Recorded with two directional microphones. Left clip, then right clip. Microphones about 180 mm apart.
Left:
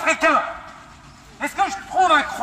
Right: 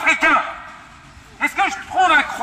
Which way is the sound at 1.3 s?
40° left (ahead or behind).